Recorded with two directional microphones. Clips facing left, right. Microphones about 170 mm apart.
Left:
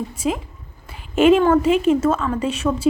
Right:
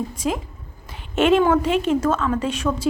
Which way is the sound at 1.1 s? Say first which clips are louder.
Left 3 dB; 5° left (ahead or behind).